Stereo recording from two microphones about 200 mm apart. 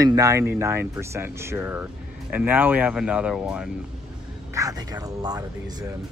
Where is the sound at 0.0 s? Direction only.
15° right (ahead or behind).